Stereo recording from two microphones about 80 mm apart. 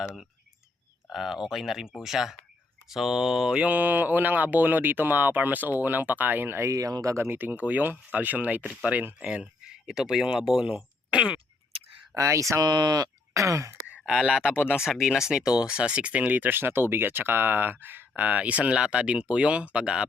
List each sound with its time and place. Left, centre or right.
1.1 s speech: centre; by 6.7 s right
6.7 s speech: right
7.3 s speech: right
12.1 s speech: right
13.3 s throat clearing: right
14.2 s speech: centre
14.5 s speech: left
14.8 s speech: centre